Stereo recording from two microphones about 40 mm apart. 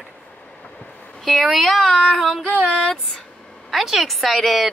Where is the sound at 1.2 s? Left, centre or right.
Centre.